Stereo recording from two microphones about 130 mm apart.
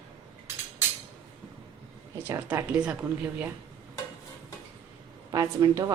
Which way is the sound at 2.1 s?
20° right (ahead or behind).